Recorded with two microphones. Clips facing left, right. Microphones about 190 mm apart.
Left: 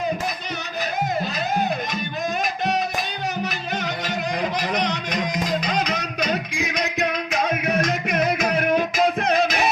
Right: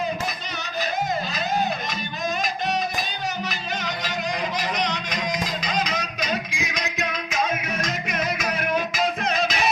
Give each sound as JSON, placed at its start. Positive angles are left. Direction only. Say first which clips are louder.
{"t": 4.7, "sound": "music", "louder": "left 3 dB", "side_deg": 55}